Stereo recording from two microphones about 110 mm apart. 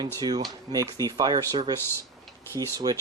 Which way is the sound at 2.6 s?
40° right (ahead or behind).